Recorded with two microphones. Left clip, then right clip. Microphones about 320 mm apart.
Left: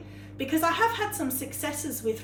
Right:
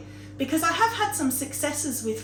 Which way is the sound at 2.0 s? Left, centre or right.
Centre.